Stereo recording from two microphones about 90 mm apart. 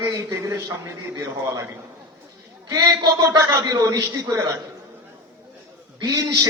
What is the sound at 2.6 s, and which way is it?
A man's voice, 40° right (ahead or behind).